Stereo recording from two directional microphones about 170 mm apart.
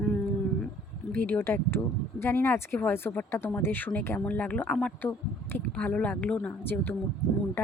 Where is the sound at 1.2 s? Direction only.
10° left (ahead or behind).